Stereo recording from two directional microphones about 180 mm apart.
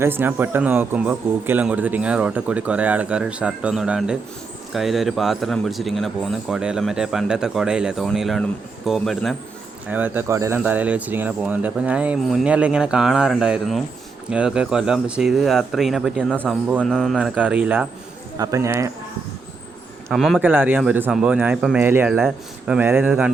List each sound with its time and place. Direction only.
0.0 s a man's voice: 10° right (ahead or behind)
9.9 s a man's voice: 10° right (ahead or behind)
20.1 s speech: centre (ahead or behind)
20.4 s a man's voice: 10° right (ahead or behind)